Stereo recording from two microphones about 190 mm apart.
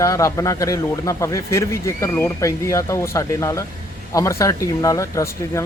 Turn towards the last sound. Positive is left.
turn(degrees=15)  # may be behind; listen again after turning